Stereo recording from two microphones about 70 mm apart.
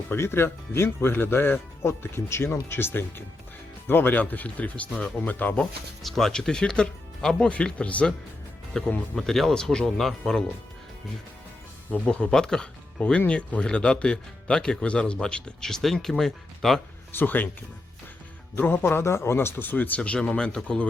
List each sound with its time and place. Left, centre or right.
0.1 s speech: left
6.0 s speech: centre
11.9 s speech: centre
17.1 s speech: left
18.5 s speech: left
20.0 s speech: centre